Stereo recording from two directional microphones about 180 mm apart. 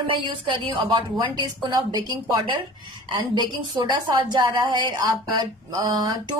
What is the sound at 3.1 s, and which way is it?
A woman's voice, 25° right (ahead or behind).